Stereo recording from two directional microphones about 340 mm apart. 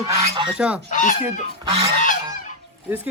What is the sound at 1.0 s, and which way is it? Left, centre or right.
Speech, left.